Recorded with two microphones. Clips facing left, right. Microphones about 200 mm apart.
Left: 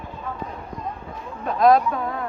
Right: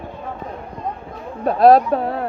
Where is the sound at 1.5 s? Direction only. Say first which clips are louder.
Right 5 dB; 35° right (ahead or behind).